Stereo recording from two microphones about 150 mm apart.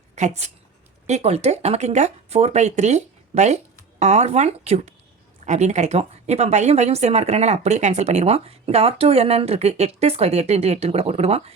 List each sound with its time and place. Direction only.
0.2 s a woman's voice: 50° right (ahead or behind)